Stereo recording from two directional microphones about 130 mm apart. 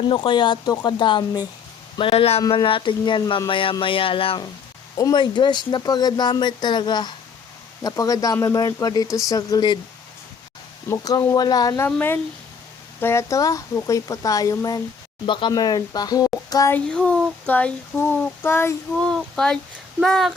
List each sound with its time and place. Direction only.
0.1 s speech: 40° left (ahead or behind)
2.0 s speech: 45° left (ahead or behind)
4.9 s speech: 30° left (ahead or behind)
10.8 s speech: 25° left (ahead or behind)
11.9 s child singing: 15° left (ahead or behind)
13.0 s a child's voice: 20° left (ahead or behind)
16.7 s child singing: 10° left (ahead or behind)
18.9 s speech: 5° left (ahead or behind)